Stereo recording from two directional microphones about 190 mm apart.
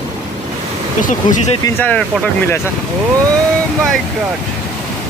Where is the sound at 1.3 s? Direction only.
35° left (ahead or behind).